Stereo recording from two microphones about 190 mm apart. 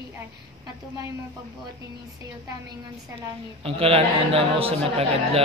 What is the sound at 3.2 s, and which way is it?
A woman's voice, 30° right (ahead or behind).